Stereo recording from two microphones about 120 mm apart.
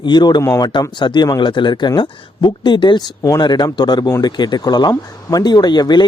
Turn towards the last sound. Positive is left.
turn(degrees=35)  # may be behind; listen again after turning